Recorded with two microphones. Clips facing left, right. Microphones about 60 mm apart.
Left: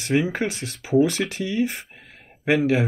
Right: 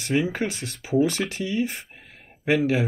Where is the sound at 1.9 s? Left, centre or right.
Left.